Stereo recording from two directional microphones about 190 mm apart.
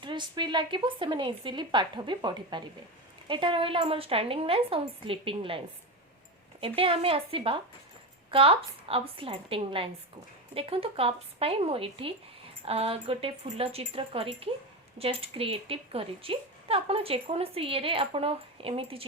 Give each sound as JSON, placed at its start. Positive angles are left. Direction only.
{"t": 0.0, "sound": "speech", "side_deg": -25}